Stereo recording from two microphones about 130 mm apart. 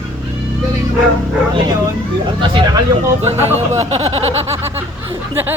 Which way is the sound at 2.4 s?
40° right (ahead or behind).